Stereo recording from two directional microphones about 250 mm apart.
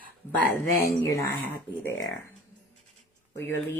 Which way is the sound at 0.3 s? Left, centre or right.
Centre.